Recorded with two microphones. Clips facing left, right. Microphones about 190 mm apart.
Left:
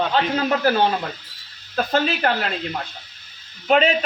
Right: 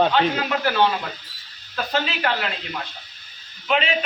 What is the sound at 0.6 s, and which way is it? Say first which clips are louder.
Speech: right 1 dB; 45° left (ahead or behind).